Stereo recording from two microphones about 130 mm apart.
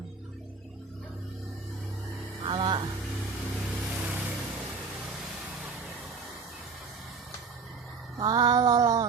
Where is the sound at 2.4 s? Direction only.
40° right (ahead or behind).